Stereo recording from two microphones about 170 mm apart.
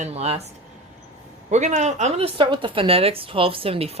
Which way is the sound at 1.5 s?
45° right (ahead or behind).